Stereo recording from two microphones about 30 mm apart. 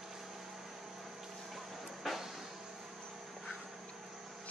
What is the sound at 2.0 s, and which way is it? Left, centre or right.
Music, centre.